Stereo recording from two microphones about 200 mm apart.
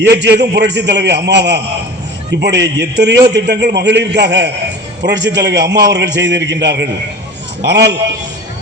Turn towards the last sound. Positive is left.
turn(degrees=-55)  # may be behind; listen again after turning